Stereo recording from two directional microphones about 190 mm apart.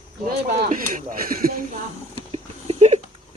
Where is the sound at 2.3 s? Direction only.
35° right (ahead or behind).